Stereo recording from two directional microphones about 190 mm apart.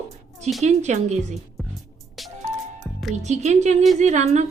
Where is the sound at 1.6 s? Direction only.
Centre (ahead or behind).